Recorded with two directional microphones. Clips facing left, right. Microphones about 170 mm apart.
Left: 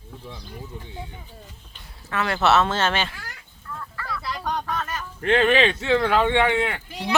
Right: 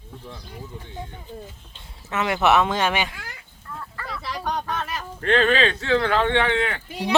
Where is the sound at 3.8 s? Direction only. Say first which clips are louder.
Left 1 dB; 25° right (ahead or behind).